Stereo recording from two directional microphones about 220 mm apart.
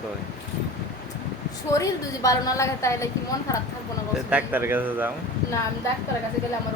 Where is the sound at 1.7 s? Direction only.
15° left (ahead or behind).